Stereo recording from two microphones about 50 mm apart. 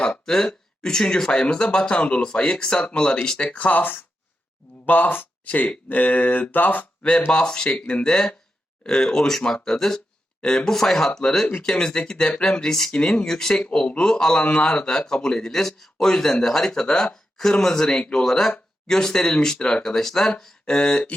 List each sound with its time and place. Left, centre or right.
0.1 s speech: centre
3.6 s mantra: left
5.5 s speech: left
6.0 s mantra: left
7.3 s speech: centre
13.7 s speech: left